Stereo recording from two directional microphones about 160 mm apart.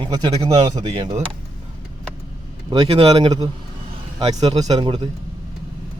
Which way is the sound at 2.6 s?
35° right (ahead or behind).